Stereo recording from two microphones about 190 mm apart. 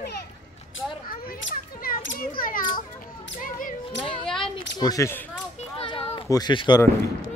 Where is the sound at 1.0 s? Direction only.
50° left (ahead or behind).